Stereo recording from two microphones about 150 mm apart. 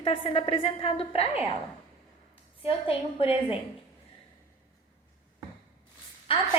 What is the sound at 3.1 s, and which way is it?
Speech, 40° left (ahead or behind).